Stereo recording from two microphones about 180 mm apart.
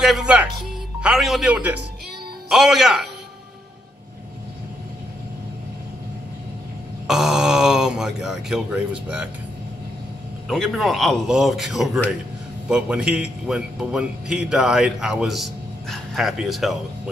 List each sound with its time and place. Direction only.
0.0 s a man's voice: 5° right (ahead or behind)
7.1 s speech: 5° right (ahead or behind)
10.5 s a man's voice: centre (ahead or behind)